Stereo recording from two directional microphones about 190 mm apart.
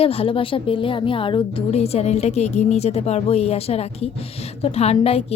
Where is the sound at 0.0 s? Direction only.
30° left (ahead or behind).